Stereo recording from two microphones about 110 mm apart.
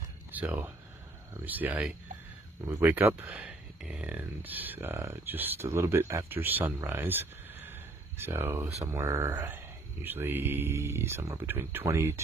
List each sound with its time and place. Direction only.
0.3 s speech: 10° right (ahead or behind)
3.3 s speech: 5° right (ahead or behind)
6.9 s a sound: 20° right (ahead or behind)
8.8 s speech: 30° right (ahead or behind)
9.3 s speech: 15° right (ahead or behind)